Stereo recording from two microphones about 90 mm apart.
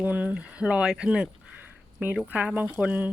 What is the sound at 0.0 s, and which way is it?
Speech, 15° right (ahead or behind).